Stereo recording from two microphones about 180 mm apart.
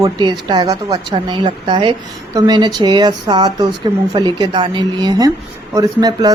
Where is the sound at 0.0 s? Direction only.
25° right (ahead or behind).